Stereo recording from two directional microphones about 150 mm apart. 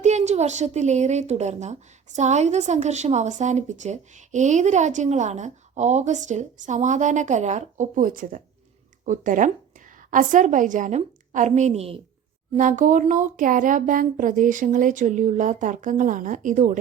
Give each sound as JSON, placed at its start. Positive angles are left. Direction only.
{"t": 0.0, "sound": "a woman's voice", "side_deg": -50}
{"t": 12.5, "sound": "speech", "side_deg": -60}